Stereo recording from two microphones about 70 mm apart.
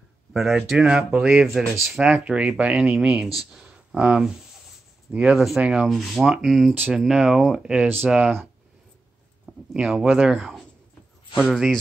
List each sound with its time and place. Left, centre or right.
0.3 s speech: centre
2.0 s speech: centre
5.9 s speech: centre
9.5 s speech: centre
10.3 s speech: centre